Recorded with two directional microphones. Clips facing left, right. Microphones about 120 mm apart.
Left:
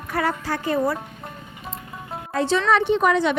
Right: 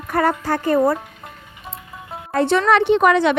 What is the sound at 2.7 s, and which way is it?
Speech, 70° right (ahead or behind).